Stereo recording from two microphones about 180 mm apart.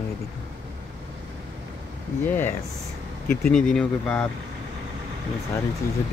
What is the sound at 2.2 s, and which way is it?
Speech, 10° left (ahead or behind).